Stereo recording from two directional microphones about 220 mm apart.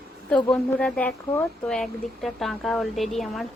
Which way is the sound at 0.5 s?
5° left (ahead or behind).